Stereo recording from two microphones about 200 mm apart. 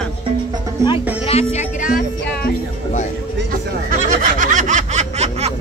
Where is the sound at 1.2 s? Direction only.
30° left (ahead or behind).